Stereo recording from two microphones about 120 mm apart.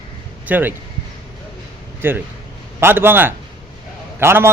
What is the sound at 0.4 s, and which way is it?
Speech, 15° right (ahead or behind).